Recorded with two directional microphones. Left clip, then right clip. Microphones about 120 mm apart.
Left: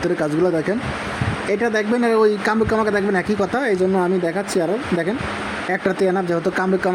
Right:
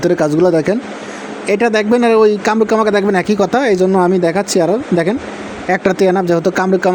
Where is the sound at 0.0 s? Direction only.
25° right (ahead or behind).